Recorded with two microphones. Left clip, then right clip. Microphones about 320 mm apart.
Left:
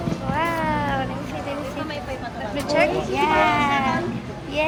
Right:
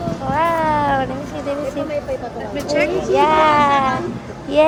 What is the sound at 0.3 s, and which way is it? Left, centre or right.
Cat, right.